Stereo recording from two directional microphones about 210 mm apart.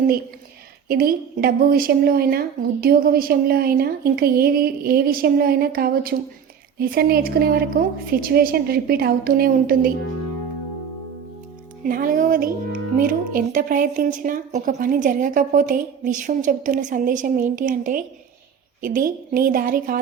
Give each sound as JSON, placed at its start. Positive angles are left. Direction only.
{"t": 0.9, "sound": "a woman's voice", "side_deg": -45}
{"t": 11.8, "sound": "a woman's voice", "side_deg": -40}